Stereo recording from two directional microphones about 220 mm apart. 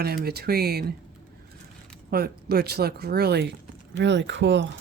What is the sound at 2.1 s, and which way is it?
Speech, 45° right (ahead or behind).